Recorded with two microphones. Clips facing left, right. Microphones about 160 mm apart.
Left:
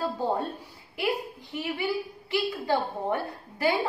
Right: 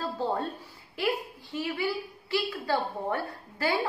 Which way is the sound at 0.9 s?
15° left (ahead or behind).